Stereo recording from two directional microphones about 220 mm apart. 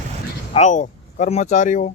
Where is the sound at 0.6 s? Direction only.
35° left (ahead or behind).